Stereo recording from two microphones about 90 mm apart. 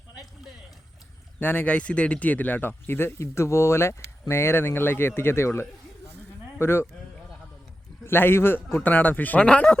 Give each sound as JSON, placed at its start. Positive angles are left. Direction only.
{"t": 1.4, "sound": "speech", "side_deg": 20}
{"t": 8.0, "sound": "speech", "side_deg": 25}